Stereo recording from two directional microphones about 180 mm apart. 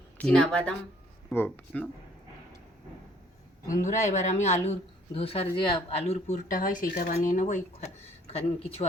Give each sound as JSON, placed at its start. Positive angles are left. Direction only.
{"t": 0.2, "sound": "speech", "side_deg": 5}
{"t": 3.8, "sound": "speech", "side_deg": 40}
{"t": 8.3, "sound": "speech", "side_deg": 35}